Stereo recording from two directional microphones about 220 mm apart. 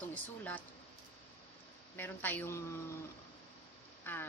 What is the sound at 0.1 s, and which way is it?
Speech, 5° left (ahead or behind).